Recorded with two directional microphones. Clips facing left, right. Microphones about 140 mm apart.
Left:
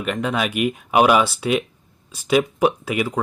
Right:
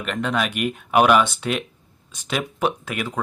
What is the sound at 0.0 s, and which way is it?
Speech, 5° left (ahead or behind).